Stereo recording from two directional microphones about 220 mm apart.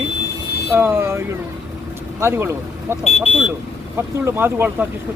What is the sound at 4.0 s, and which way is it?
Speech, 10° right (ahead or behind).